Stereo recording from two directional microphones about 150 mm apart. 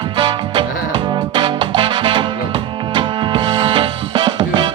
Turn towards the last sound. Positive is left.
turn(degrees=-30)  # may be behind; listen again after turning